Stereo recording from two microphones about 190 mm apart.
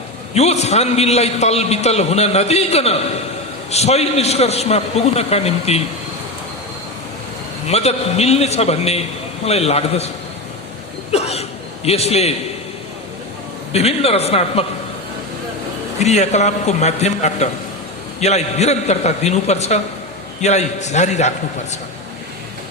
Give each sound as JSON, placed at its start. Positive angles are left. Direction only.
{"t": 0.3, "sound": "a man's voice", "side_deg": 35}
{"t": 7.7, "sound": "a man's voice", "side_deg": 35}
{"t": 11.1, "sound": "a man's voice", "side_deg": 35}
{"t": 13.7, "sound": "a man's voice", "side_deg": 30}
{"t": 16.0, "sound": "a man's voice", "side_deg": 35}